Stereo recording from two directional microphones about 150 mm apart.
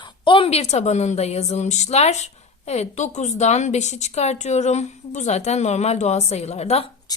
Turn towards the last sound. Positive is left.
turn(degrees=25)  # may be behind; listen again after turning